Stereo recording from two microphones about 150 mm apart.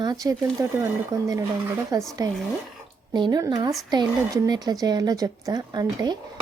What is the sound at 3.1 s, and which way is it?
Speech, 30° right (ahead or behind).